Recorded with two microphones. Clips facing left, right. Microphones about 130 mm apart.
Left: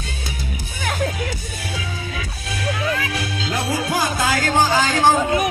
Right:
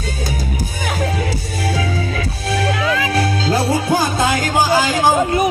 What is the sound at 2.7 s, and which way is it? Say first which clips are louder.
Music: right 5 dB; 90° right.